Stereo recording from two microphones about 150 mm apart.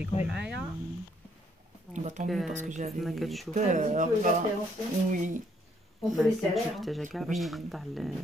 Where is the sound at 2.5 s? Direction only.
55° right (ahead or behind).